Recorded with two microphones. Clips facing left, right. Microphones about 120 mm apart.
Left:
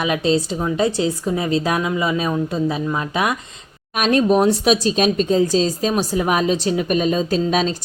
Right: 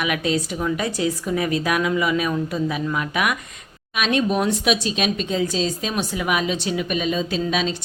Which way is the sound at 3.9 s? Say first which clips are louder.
Left 5 dB; 40° left (ahead or behind).